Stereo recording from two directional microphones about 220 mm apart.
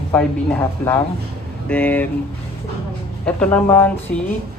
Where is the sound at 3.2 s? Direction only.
5° left (ahead or behind).